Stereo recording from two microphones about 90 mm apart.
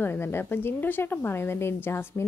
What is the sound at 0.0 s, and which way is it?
A woman's voice, 25° left (ahead or behind).